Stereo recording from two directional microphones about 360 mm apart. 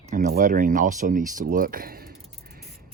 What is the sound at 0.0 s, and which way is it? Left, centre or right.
Speech, right.